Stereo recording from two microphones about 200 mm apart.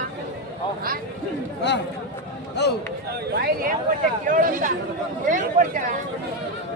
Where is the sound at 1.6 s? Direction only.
60° left (ahead or behind).